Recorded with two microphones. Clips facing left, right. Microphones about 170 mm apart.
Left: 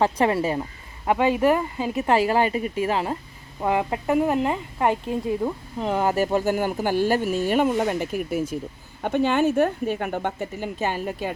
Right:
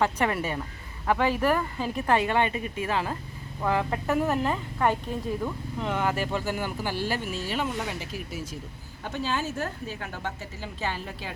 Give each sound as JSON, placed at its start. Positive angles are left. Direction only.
{"t": 0.0, "sound": "speech", "side_deg": 30}
{"t": 1.0, "sound": "speech", "side_deg": 20}
{"t": 5.4, "sound": "speech", "side_deg": 30}